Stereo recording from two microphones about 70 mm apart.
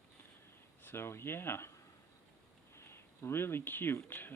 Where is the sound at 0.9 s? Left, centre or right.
Left.